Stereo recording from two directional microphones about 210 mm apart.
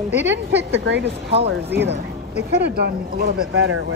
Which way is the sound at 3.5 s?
70° right (ahead or behind).